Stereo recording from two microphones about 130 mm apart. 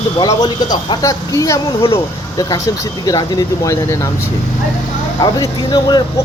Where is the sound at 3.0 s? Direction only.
30° left (ahead or behind).